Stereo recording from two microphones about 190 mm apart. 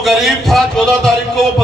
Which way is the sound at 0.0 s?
Centre (ahead or behind).